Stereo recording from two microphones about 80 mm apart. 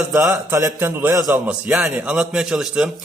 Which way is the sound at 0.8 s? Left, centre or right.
Right.